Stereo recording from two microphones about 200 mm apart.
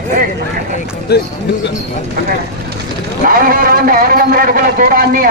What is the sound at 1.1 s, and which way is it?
Speech, 55° left (ahead or behind).